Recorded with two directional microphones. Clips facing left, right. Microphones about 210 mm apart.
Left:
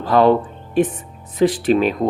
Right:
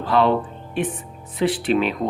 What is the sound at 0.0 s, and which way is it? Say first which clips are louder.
Speech: left 4 dB; 40° left (ahead or behind).